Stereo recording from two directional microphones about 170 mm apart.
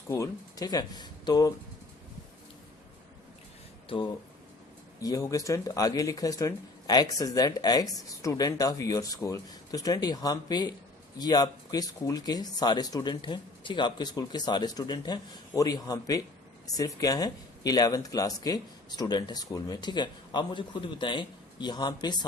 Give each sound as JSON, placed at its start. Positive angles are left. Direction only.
{"t": 0.1, "sound": "speech", "side_deg": 20}
{"t": 3.8, "sound": "speech", "side_deg": 30}